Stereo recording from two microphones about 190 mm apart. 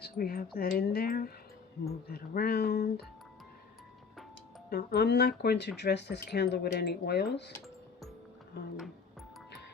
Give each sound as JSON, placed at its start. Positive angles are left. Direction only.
{"t": 0.0, "sound": "wind chime", "side_deg": 50}
{"t": 0.5, "sound": "speech", "side_deg": 55}
{"t": 4.7, "sound": "speech", "side_deg": 55}